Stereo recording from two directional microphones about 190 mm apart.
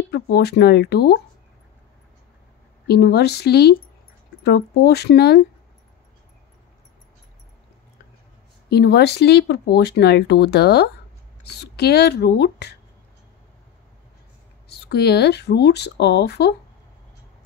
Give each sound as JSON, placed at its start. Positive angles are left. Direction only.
{"t": 0.1, "sound": "speech", "side_deg": 60}
{"t": 2.9, "sound": "speech", "side_deg": 60}
{"t": 8.6, "sound": "speech", "side_deg": 60}
{"t": 14.7, "sound": "speech", "side_deg": 60}